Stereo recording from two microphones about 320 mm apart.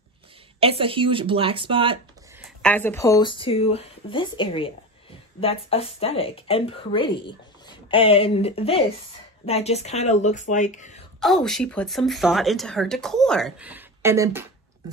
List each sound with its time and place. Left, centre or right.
0.6 s speech: centre
2.4 s speech: centre; by 11.0 s left
11.1 s speech: centre